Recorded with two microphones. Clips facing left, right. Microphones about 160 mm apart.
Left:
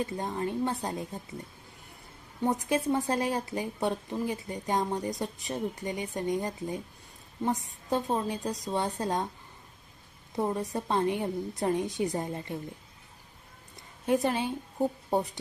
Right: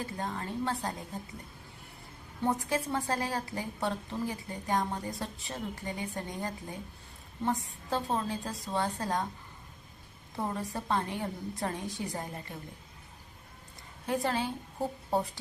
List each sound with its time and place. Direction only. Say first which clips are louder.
0.0 s a woman's voice: left 5 dB; 20° left (ahead or behind)
2.5 s a woman's voice: left 4 dB; 20° left (ahead or behind)
10.3 s a woman's voice: left 5 dB; 20° left (ahead or behind)
14.1 s a woman's voice: left 4 dB; 20° left (ahead or behind)